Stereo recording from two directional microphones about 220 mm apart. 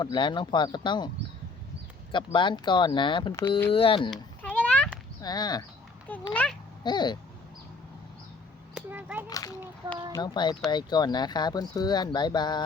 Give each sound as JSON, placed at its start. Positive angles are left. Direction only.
{"t": 0.0, "sound": "speech", "side_deg": 20}
{"t": 2.1, "sound": "speech", "side_deg": 20}
{"t": 4.1, "sound": "a sound", "side_deg": 5}
{"t": 5.2, "sound": "speech", "side_deg": 20}
{"t": 6.3, "sound": "speech", "side_deg": 5}
{"t": 6.8, "sound": "speech", "side_deg": 20}
{"t": 8.7, "sound": "a sound", "side_deg": -5}
{"t": 9.3, "sound": "speech", "side_deg": 15}